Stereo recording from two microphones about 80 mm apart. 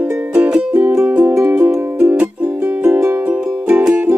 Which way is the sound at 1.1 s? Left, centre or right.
Right.